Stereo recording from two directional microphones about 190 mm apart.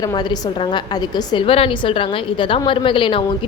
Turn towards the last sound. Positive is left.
turn(degrees=25)  # may be behind; listen again after turning